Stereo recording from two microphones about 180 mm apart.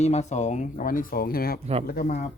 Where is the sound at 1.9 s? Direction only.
50° left (ahead or behind).